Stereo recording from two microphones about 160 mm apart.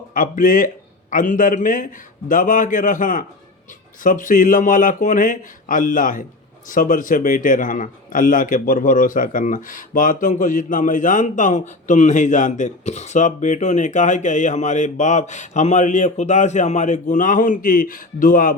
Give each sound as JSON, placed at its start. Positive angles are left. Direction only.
{"t": 0.1, "sound": "a man's voice", "side_deg": 60}